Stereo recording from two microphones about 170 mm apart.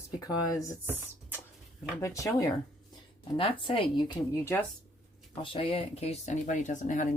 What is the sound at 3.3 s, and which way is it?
Speech, 30° left (ahead or behind).